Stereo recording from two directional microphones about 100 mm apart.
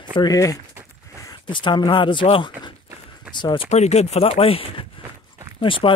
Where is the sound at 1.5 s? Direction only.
55° left (ahead or behind).